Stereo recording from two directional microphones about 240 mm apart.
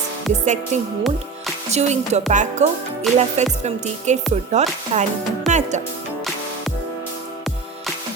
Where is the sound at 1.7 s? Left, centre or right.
Right.